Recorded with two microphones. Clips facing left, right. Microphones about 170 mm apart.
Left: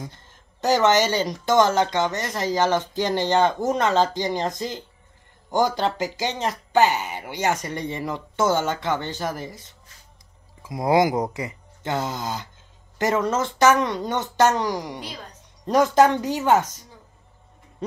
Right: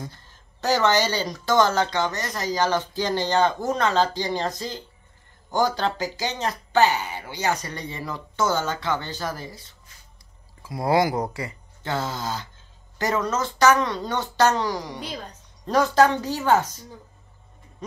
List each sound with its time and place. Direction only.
0.0 s speech: 20° left (ahead or behind)